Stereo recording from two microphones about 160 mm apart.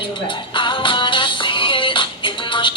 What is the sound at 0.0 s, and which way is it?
Music, 30° left (ahead or behind).